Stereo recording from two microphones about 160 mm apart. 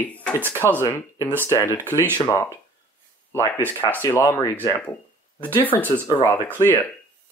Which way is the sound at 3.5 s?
10° left (ahead or behind).